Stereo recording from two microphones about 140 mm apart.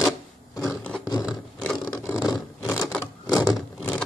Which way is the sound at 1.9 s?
20° left (ahead or behind).